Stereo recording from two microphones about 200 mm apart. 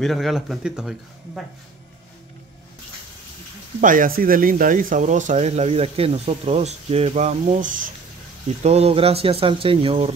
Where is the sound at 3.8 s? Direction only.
40° right (ahead or behind).